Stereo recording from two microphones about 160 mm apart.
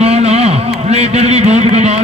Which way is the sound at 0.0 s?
40° right (ahead or behind).